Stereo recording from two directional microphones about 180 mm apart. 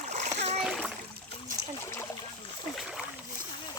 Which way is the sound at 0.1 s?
40° right (ahead or behind).